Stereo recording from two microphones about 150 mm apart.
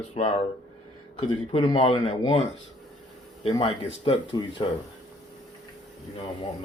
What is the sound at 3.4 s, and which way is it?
Speech, 40° left (ahead or behind).